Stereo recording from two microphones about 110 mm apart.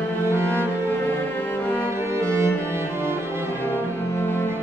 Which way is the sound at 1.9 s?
25° right (ahead or behind).